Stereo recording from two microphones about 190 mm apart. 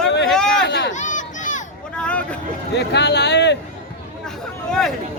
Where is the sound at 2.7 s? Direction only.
65° left (ahead or behind).